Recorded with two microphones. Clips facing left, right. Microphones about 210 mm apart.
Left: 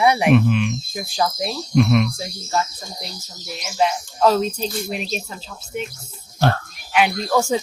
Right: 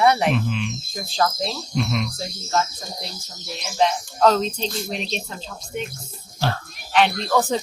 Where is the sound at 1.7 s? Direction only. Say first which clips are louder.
Left 10 dB; 60° left (ahead or behind).